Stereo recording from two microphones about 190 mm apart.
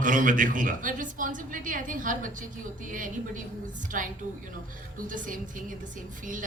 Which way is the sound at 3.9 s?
45° right (ahead or behind).